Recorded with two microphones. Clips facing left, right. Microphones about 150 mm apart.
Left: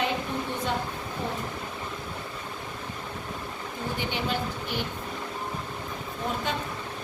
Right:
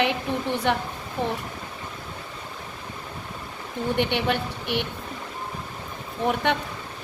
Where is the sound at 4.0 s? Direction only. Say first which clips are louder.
Right 5 dB; 65° right (ahead or behind).